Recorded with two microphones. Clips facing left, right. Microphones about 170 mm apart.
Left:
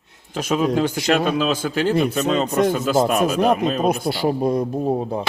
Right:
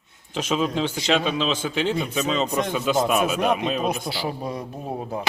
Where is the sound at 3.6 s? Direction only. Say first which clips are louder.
Left 5 dB; 45° left (ahead or behind).